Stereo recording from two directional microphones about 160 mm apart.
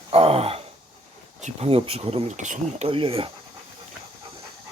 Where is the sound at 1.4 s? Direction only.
45° right (ahead or behind).